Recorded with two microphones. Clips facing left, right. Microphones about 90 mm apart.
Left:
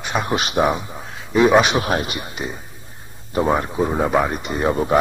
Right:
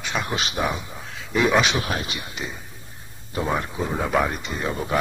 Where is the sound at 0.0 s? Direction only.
40° left (ahead or behind).